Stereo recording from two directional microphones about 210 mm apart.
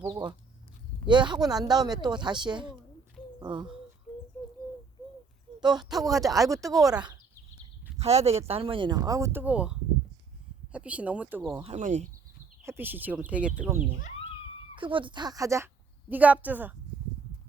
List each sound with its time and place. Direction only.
1.0 s speech: 20° right (ahead or behind)
5.5 s speech: 20° right (ahead or behind)
7.9 s speech: 30° right (ahead or behind); by 11.6 s 10° right (ahead or behind)
11.6 s speech: 35° right (ahead or behind)
12.6 s speech: 10° right (ahead or behind)
14.8 s a woman's voice: 25° right (ahead or behind); by 16.7 s 10° right (ahead or behind)